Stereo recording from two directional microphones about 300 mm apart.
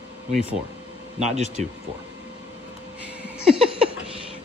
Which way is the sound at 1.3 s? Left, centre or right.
Right.